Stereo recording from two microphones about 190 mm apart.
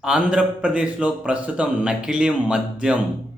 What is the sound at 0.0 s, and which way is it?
A man's voice, 5° right (ahead or behind).